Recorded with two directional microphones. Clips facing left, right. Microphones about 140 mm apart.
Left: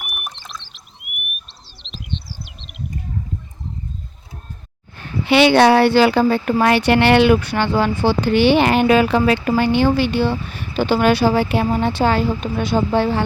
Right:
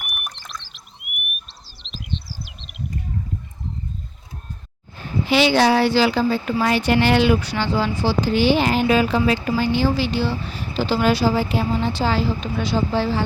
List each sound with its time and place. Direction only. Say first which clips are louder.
0.0 s a sound: left 2 dB; 5° left (ahead or behind)
1.5 s bird: left 1 dB; centre (ahead or behind)
5.2 s speech: left 5 dB; 65° left (ahead or behind)